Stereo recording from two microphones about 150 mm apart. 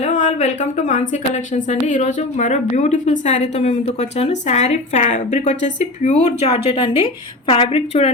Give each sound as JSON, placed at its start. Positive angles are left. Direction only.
{"t": 0.0, "sound": "a woman's voice", "side_deg": 55}